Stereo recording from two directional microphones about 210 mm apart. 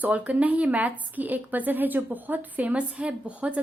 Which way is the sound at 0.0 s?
5° right (ahead or behind).